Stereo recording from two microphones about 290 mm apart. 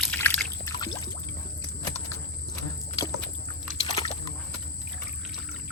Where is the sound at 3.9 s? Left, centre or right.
Centre.